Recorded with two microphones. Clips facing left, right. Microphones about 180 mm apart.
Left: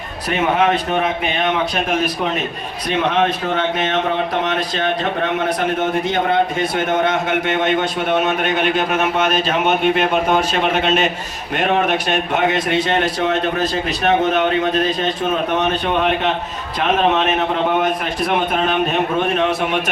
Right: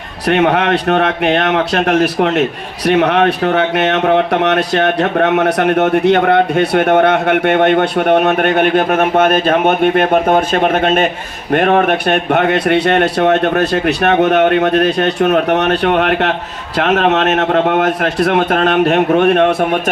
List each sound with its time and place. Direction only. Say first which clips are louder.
0.3 s a man's voice: right 5 dB; 70° right (ahead or behind)